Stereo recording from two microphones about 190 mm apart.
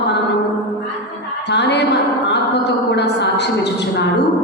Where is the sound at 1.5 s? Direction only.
65° left (ahead or behind).